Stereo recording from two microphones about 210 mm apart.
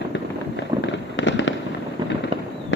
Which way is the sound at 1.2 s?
60° left (ahead or behind).